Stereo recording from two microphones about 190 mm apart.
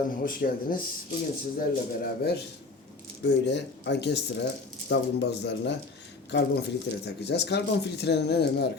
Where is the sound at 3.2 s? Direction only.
65° left (ahead or behind).